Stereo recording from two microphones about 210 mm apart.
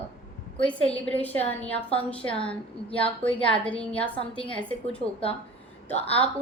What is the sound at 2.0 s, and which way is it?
A woman's voice, 5° left (ahead or behind).